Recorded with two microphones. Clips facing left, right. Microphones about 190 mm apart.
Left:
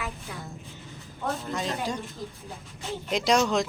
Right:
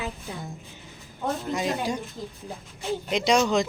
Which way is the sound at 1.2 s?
10° right (ahead or behind).